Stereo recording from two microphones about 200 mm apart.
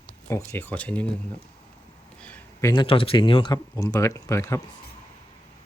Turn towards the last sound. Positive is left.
turn(degrees=15)  # may be behind; listen again after turning